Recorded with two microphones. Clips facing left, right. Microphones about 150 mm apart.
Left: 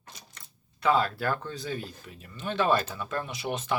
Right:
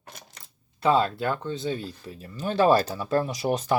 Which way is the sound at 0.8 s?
25° right (ahead or behind).